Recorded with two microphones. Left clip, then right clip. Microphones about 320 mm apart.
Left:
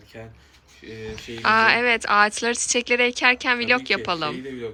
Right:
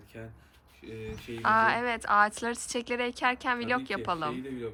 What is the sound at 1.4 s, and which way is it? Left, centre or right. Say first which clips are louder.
A woman's voice: left 7 dB; centre.